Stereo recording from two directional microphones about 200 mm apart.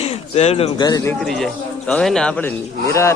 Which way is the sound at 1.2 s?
Centre (ahead or behind).